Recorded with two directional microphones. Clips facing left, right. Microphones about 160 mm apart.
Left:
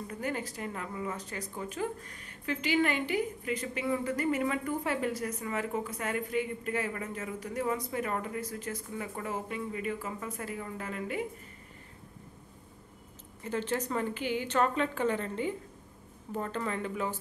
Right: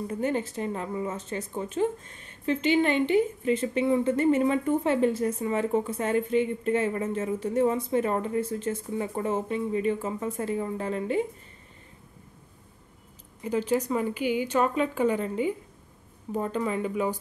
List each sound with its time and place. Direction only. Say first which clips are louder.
0.1 s a woman's voice: right 7 dB; 25° right (ahead or behind)
13.4 s speech: right 7 dB; 10° right (ahead or behind)